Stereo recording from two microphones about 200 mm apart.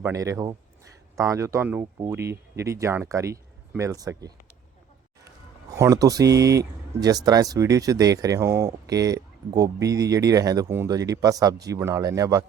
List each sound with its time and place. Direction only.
0.0 s speech: 15° right (ahead or behind)
5.7 s speech: 15° right (ahead or behind)